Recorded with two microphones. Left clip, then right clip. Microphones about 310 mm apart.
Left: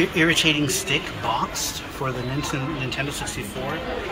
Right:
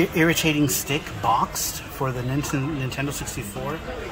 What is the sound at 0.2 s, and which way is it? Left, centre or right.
Speech, right.